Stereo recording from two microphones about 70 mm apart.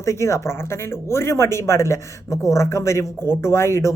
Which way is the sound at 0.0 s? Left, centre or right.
Left.